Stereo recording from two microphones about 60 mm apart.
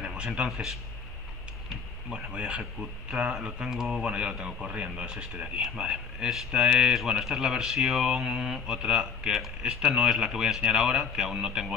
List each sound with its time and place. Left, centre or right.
0.0 s a sound: centre
0.5 s speech: centre
2.0 s speech: centre